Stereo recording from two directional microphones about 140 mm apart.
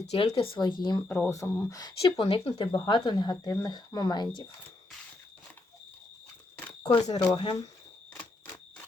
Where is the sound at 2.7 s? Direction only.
30° left (ahead or behind).